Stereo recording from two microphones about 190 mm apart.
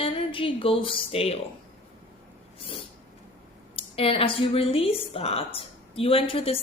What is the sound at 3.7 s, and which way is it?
A woman's voice, 30° left (ahead or behind).